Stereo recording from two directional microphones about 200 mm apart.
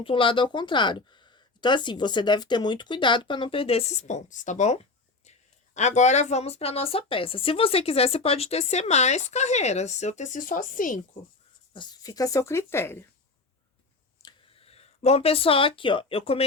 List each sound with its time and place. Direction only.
0.0 s a woman's voice: 25° left (ahead or behind); by 11.0 s 40° left (ahead or behind)
11.7 s speech: 20° left (ahead or behind)
14.2 s speech: 25° left (ahead or behind)